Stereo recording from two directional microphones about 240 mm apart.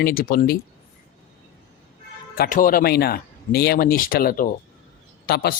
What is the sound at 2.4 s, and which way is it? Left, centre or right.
Speech, left.